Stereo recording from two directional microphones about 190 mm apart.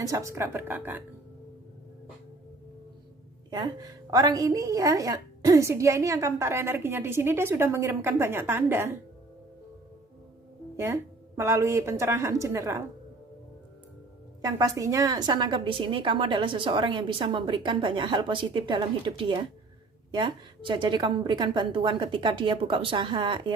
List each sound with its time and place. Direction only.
0.0 s a woman's voice: 15° right (ahead or behind)
3.5 s a woman's voice: 20° right (ahead or behind)
11.3 s a woman's voice: 15° right (ahead or behind)
14.4 s a woman's voice: 15° right (ahead or behind)